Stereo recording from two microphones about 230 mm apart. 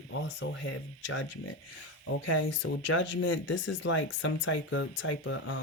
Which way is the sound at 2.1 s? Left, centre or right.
Left.